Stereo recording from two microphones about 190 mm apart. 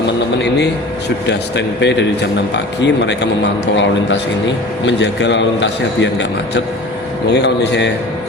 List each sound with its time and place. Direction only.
1.3 s a man's voice: 65° left (ahead or behind)
7.3 s a man's voice: 65° left (ahead or behind)